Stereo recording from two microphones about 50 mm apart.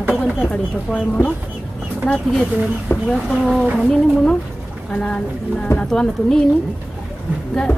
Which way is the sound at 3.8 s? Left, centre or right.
Centre.